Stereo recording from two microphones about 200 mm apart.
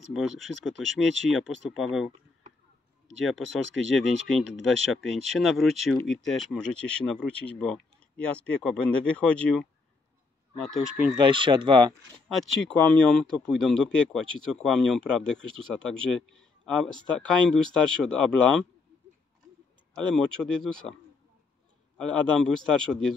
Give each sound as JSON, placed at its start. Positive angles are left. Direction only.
{"t": 0.1, "sound": "speech", "side_deg": 0}
{"t": 3.9, "sound": "speech", "side_deg": 0}
{"t": 11.1, "sound": "speech", "side_deg": -25}
{"t": 12.3, "sound": "speech", "side_deg": 0}
{"t": 20.2, "sound": "speech", "side_deg": 0}
{"t": 21.9, "sound": "speech", "side_deg": 5}